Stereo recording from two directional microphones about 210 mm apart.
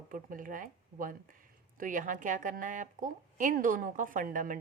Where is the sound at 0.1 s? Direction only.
40° right (ahead or behind).